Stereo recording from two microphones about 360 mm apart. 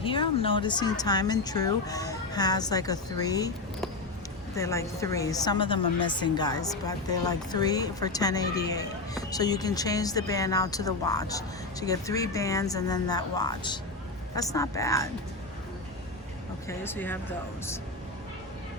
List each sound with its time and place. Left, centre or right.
0.0 s a woman's voice: centre
16.6 s a woman's voice: centre